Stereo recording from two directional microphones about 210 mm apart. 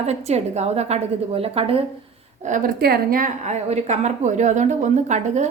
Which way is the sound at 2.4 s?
35° right (ahead or behind).